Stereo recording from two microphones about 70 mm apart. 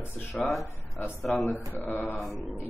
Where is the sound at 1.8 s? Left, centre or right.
Left.